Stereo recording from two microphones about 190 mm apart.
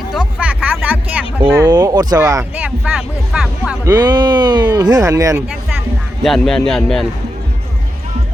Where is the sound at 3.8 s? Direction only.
20° right (ahead or behind).